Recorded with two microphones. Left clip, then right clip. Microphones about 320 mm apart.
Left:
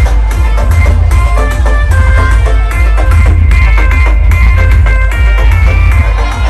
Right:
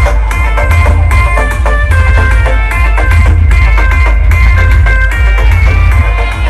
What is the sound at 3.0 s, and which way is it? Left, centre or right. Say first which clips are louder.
Music: right 3 dB; centre.